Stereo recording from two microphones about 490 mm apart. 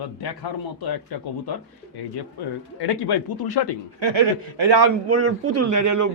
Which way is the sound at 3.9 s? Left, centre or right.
Right.